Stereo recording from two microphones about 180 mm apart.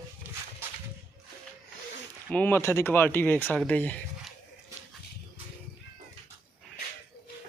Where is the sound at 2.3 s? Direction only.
10° left (ahead or behind).